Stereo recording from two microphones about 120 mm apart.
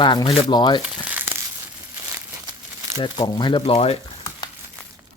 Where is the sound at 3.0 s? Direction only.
40° left (ahead or behind).